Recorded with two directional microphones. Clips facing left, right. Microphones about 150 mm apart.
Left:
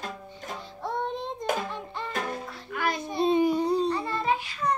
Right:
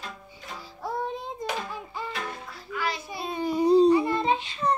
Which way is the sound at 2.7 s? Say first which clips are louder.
Left 2 dB; 50° left (ahead or behind).